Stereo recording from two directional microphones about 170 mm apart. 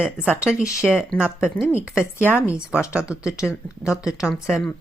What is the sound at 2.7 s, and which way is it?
Speech, 15° left (ahead or behind).